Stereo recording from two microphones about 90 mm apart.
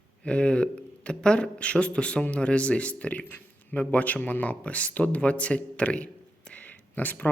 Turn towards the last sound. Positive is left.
turn(degrees=20)  # may be behind; listen again after turning